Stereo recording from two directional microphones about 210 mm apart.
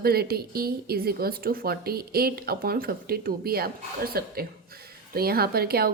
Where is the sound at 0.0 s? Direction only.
45° right (ahead or behind).